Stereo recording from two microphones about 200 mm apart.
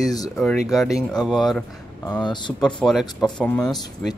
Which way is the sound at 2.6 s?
Centre (ahead or behind).